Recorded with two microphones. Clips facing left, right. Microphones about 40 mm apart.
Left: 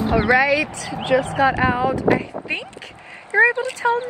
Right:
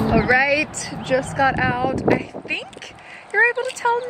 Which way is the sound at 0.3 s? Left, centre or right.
Centre.